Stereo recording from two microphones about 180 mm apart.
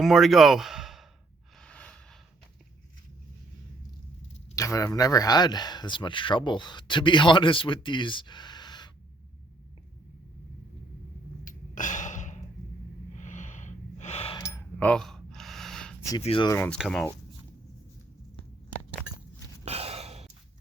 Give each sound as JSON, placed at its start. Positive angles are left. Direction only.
{"t": 0.0, "sound": "speech", "side_deg": 0}
{"t": 1.5, "sound": "gasp", "side_deg": 5}
{"t": 4.5, "sound": "speech", "side_deg": 20}
{"t": 11.4, "sound": "gasp", "side_deg": 45}
{"t": 13.1, "sound": "a sound", "side_deg": 40}
{"t": 14.3, "sound": "a sound", "side_deg": 15}
{"t": 16.2, "sound": "speech", "side_deg": 30}
{"t": 16.5, "sound": "speech", "side_deg": 15}
{"t": 16.7, "sound": "speech", "side_deg": 0}
{"t": 19.6, "sound": "gasp", "side_deg": -35}